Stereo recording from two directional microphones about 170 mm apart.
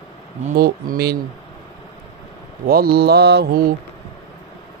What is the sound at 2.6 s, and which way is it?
Mantra, 60° right (ahead or behind).